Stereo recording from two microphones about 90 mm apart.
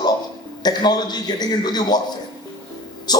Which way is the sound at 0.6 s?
50° left (ahead or behind).